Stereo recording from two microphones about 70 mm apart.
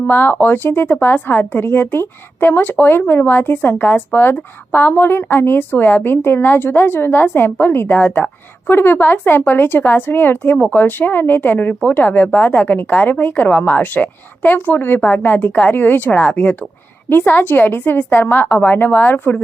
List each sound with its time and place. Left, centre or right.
0.0 s speech: left